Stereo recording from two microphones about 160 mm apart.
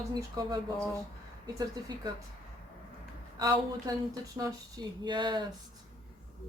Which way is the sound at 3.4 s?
20° right (ahead or behind).